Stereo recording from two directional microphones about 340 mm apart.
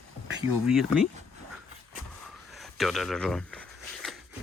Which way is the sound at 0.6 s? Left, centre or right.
Centre.